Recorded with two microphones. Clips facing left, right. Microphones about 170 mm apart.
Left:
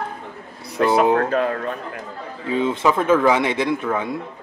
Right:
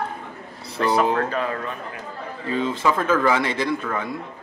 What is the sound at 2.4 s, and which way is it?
Speech, 20° left (ahead or behind).